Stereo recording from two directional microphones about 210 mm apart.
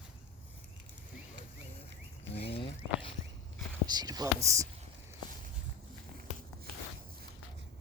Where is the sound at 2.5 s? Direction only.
25° left (ahead or behind).